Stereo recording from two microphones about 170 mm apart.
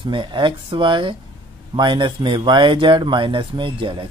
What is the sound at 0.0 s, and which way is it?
Speech, 30° right (ahead or behind).